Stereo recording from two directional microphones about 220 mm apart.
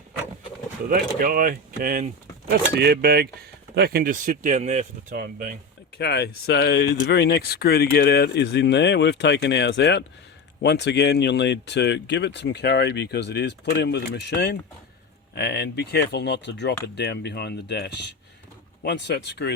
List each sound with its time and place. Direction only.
0.9 s speech: 40° right (ahead or behind)
6.0 s speech: 50° left (ahead or behind)